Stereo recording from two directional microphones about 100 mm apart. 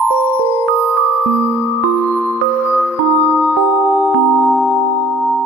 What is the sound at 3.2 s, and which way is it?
Music, 20° left (ahead or behind).